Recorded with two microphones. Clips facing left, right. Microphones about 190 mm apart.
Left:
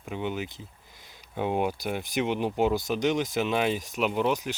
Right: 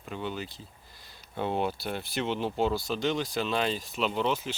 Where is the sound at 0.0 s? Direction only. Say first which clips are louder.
Left 3 dB; 15° left (ahead or behind).